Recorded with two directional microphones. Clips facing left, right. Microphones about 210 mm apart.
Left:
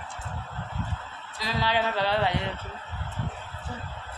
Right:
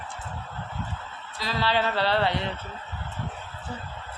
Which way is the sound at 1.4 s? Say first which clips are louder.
Right 1 dB; 15° left (ahead or behind).